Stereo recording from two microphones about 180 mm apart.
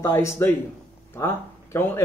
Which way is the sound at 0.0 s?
15° left (ahead or behind).